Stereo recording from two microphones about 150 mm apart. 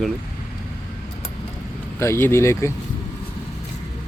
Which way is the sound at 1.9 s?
15° left (ahead or behind).